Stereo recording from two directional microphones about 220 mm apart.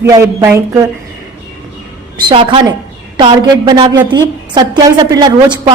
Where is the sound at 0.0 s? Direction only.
15° right (ahead or behind).